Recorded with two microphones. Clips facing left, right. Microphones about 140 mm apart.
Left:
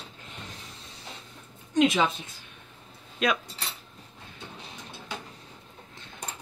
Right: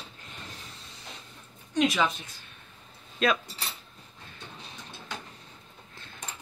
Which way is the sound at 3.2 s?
15° left (ahead or behind).